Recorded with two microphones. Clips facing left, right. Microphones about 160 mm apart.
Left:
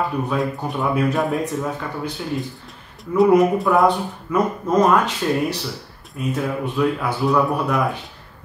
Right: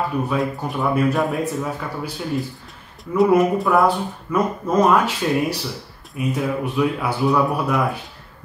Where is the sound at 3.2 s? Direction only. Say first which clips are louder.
Left 1 dB; centre (ahead or behind).